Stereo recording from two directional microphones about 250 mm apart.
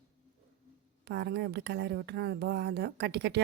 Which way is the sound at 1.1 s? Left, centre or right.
Right.